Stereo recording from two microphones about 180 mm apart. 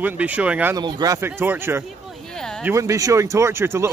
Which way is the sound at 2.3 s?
5° left (ahead or behind).